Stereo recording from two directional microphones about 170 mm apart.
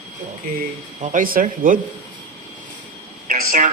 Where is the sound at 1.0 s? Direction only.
50° right (ahead or behind).